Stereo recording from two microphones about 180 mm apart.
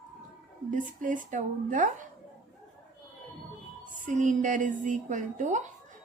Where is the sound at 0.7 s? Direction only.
45° right (ahead or behind).